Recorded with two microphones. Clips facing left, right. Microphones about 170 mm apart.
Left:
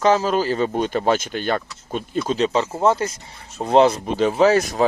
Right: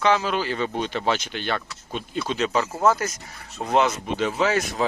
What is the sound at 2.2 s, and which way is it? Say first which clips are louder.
Speech: left 3 dB; 35° left (ahead or behind).